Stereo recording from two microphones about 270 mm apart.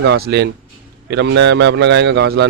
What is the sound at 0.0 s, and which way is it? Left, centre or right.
A man's voice, right.